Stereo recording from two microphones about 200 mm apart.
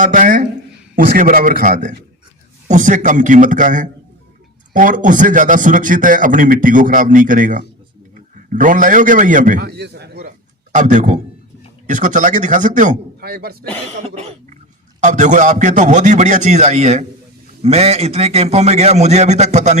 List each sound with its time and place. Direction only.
0.0 s a man's voice: 40° right (ahead or behind)
10.8 s a man's voice: 40° right (ahead or behind)
13.9 s a man's voice: 30° right (ahead or behind)